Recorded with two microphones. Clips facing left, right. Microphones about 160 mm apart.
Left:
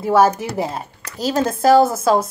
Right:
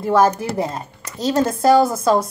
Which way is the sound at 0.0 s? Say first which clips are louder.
Left 1 dB; 5° left (ahead or behind).